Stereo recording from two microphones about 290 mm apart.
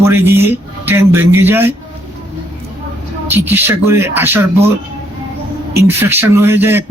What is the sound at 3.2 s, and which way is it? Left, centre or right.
Speech, centre.